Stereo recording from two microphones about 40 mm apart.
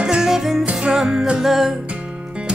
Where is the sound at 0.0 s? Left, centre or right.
Centre.